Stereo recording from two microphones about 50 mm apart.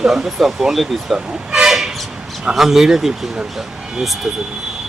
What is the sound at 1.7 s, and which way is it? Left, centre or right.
Train, centre.